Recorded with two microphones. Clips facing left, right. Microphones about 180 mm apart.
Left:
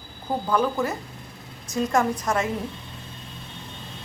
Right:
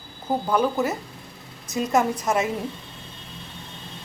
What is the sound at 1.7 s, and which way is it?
Speech, 5° right (ahead or behind).